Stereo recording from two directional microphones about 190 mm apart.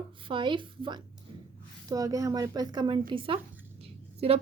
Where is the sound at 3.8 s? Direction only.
30° right (ahead or behind).